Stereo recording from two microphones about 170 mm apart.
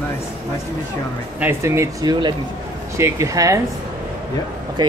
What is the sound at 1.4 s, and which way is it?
Speech, 15° right (ahead or behind).